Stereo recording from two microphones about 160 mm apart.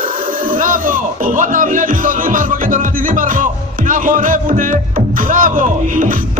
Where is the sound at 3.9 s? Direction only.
55° right (ahead or behind).